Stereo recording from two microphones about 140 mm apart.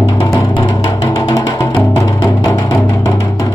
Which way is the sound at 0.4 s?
35° left (ahead or behind).